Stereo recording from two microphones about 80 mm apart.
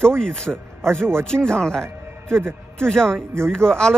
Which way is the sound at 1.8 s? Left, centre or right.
Right.